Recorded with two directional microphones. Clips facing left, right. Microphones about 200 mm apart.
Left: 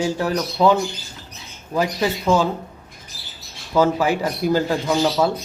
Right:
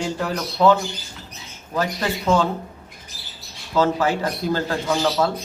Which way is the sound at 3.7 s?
10° left (ahead or behind).